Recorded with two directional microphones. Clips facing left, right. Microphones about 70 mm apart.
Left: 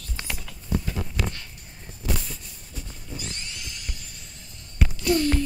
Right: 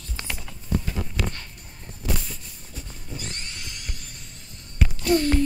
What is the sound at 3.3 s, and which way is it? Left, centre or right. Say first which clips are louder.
Music: right 1 dB; right.